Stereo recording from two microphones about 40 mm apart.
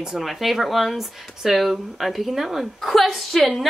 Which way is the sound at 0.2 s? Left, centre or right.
Centre.